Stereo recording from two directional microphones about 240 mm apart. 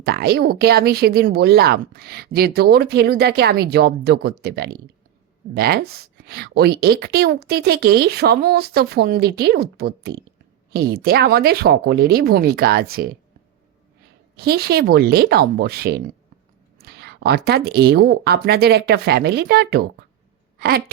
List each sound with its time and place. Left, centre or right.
0.0 s speech: right
14.3 s speech: right
20.6 s a sound: right